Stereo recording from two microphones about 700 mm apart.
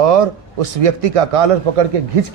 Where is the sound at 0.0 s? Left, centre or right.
Right.